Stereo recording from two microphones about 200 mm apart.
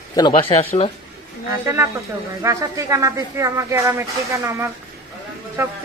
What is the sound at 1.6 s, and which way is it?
A man's voice, 10° right (ahead or behind).